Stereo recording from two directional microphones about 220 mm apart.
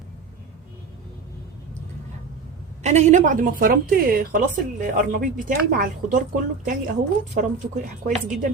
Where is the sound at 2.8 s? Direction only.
30° right (ahead or behind).